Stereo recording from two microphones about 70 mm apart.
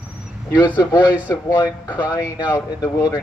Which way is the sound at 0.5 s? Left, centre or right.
Left.